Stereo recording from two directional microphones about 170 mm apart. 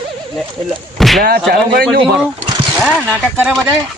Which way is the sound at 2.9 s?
10° left (ahead or behind).